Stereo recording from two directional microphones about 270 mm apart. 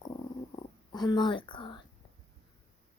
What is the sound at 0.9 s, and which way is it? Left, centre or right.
Speech, centre.